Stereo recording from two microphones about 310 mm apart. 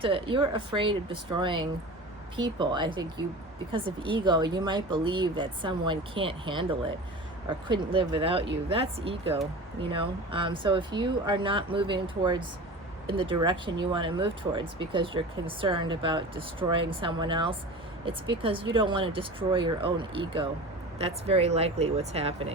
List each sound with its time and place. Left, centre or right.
0.0 s speech: centre